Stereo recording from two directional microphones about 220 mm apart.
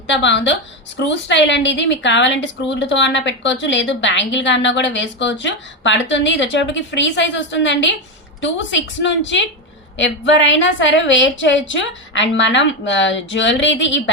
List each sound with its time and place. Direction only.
0.1 s a woman's voice: 55° left (ahead or behind)